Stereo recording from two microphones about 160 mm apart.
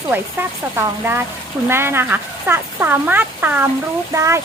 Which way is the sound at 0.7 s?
15° right (ahead or behind).